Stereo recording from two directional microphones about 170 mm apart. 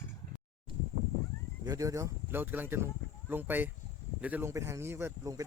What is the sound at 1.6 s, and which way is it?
Speech, 20° right (ahead or behind).